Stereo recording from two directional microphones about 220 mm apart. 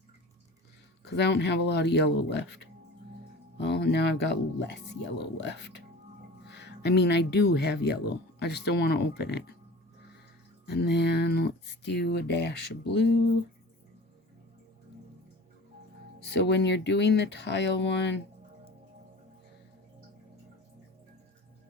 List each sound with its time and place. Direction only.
1.0 s speech: 50° left (ahead or behind)
10.7 s speech: 45° left (ahead or behind)
16.2 s speech: 50° left (ahead or behind)